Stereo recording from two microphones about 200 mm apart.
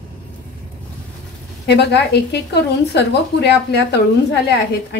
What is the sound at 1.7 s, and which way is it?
Speech, 55° left (ahead or behind).